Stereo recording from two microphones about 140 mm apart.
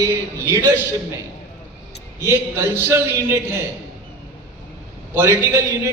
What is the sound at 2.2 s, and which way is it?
A man's voice, 20° right (ahead or behind).